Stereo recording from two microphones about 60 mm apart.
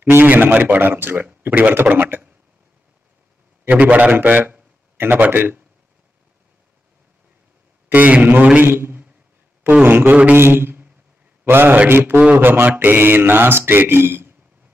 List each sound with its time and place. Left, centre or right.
0.0 s a man's voice: right
3.6 s a man's voice: right
7.9 s a man's voice: right
8.6 s a sound: right
9.8 s a man's voice: right
10.3 s a sound: right
11.4 s a man's voice: right